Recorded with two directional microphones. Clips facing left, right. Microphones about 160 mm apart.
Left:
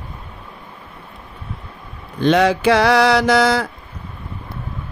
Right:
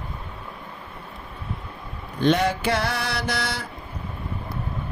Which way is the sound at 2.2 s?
90° left.